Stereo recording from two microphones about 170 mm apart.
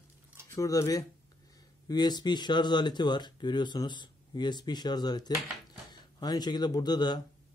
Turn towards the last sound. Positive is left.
turn(degrees=25)  # may be behind; listen again after turning